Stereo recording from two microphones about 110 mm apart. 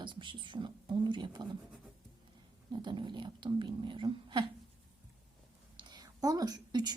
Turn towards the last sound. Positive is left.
turn(degrees=-35)  # may be behind; listen again after turning